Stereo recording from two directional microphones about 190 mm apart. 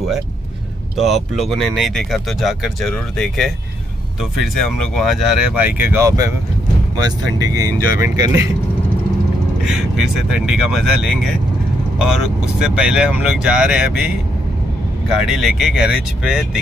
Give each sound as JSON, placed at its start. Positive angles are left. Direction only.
{"t": 0.9, "sound": "speech", "side_deg": 0}
{"t": 9.7, "sound": "speech", "side_deg": -5}
{"t": 12.0, "sound": "speech", "side_deg": -5}
{"t": 15.2, "sound": "speech", "side_deg": 0}